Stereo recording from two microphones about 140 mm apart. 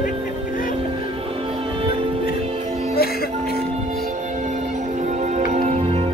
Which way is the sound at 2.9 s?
90° left.